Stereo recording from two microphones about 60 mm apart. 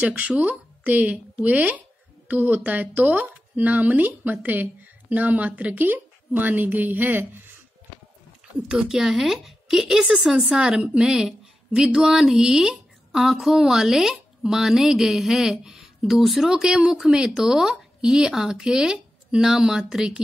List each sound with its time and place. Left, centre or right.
0.0 s a woman's voice: right
8.6 s a woman's voice: centre